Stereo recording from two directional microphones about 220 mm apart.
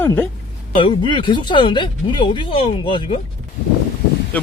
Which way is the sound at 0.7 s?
20° left (ahead or behind).